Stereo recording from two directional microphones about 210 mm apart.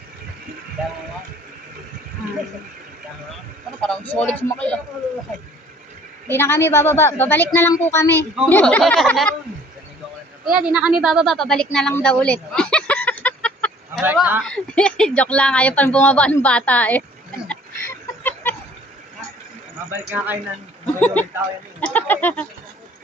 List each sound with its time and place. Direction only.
3.8 s a woman's voice: 5° left (ahead or behind)
6.2 s a woman's voice: 10° left (ahead or behind)
10.4 s a woman's voice: 5° right (ahead or behind)
14.0 s speech: 10° right (ahead or behind)
14.4 s speech: 5° left (ahead or behind)
17.5 s a sound: 10° left (ahead or behind)
19.9 s speech: 10° right (ahead or behind)
20.8 s speech: 5° left (ahead or behind)